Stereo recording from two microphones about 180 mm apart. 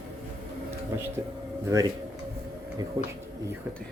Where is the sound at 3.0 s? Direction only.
25° right (ahead or behind).